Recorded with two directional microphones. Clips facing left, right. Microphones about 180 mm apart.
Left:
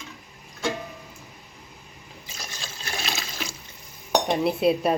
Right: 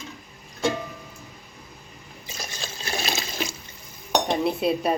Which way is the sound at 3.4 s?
20° right (ahead or behind).